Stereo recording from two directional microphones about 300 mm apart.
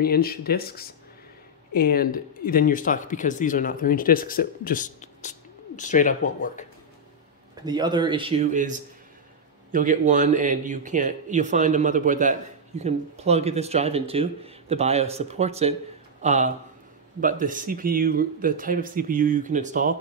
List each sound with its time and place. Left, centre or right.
0.0 s speech: left
7.6 s a man's voice: centre